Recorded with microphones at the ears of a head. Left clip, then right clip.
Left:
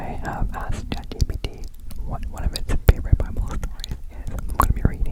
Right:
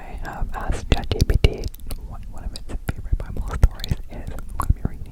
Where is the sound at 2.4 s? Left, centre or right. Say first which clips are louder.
Left 6 dB; left.